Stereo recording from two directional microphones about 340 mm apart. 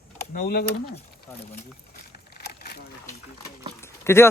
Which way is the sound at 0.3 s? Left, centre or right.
Left.